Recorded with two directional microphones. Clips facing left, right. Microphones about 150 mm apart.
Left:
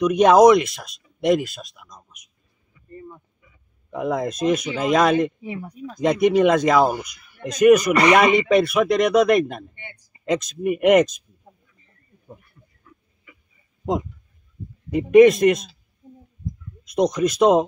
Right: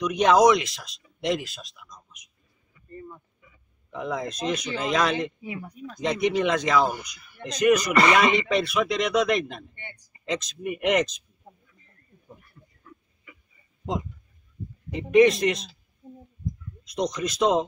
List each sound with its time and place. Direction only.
0.2 s speech: 50° left (ahead or behind)
3.9 s a man's voice: 50° left (ahead or behind)
5.4 s speech: 30° left (ahead or behind)
5.9 s a man's voice: 50° left (ahead or behind)
7.9 s speech: 15° left (ahead or behind)
8.5 s a man's voice: 55° left (ahead or behind)
9.8 s a sound: 15° left (ahead or behind)
10.2 s a man's voice: 50° left (ahead or behind)
15.0 s a man's voice: 50° left (ahead or behind)
16.8 s a man's voice: 50° left (ahead or behind)